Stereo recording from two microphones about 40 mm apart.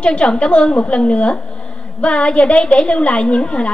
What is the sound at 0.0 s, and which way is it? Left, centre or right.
A woman's voice, left.